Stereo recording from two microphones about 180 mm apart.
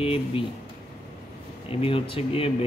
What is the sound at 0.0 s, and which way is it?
Speech, 30° left (ahead or behind).